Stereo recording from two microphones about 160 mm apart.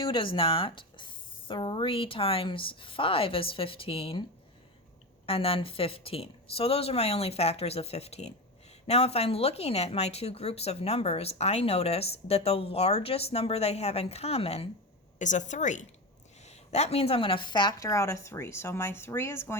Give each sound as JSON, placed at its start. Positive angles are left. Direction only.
{"t": 0.0, "sound": "speech", "side_deg": 30}
{"t": 15.2, "sound": "a woman's voice", "side_deg": 50}